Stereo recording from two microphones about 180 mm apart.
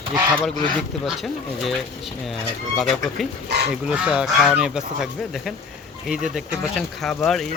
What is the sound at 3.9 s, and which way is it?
Speech, 5° right (ahead or behind).